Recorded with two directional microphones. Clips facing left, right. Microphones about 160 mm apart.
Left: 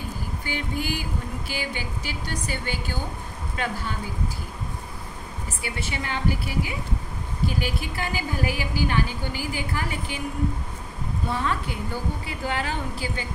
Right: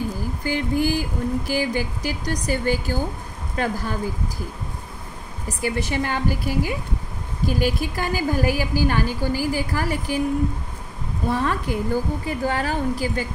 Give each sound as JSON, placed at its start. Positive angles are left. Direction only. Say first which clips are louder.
{"t": 0.4, "sound": "a sound", "louder": "right 9 dB", "side_deg": -40}
{"t": 1.5, "sound": "a woman's voice", "louder": "right 8 dB", "side_deg": -40}
{"t": 5.5, "sound": "a woman's voice", "louder": "right 9 dB", "side_deg": -40}
{"t": 11.2, "sound": "a woman's voice", "louder": "right 5 dB", "side_deg": -40}